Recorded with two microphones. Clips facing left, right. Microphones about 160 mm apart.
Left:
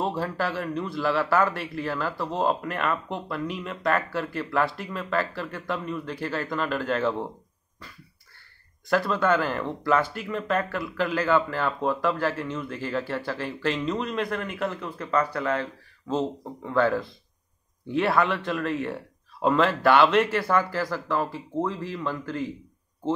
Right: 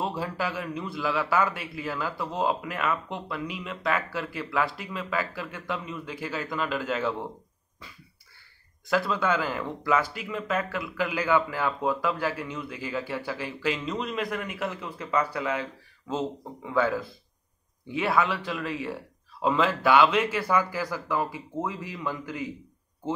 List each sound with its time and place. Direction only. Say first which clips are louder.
0.0 s a man's voice: left 3 dB; 5° right (ahead or behind)
8.8 s a man's voice: left 2 dB; 5° right (ahead or behind)